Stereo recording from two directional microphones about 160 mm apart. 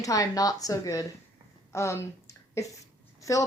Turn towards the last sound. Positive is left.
turn(degrees=20)  # may be behind; listen again after turning